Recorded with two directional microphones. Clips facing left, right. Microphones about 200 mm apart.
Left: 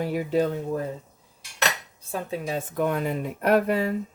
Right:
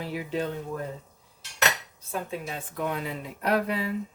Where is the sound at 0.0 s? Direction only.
45° left (ahead or behind).